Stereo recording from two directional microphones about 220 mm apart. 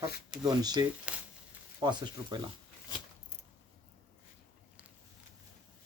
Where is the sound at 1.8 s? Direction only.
20° right (ahead or behind).